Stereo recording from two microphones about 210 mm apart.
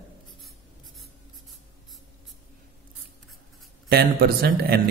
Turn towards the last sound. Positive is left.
turn(degrees=-45)  # may be behind; listen again after turning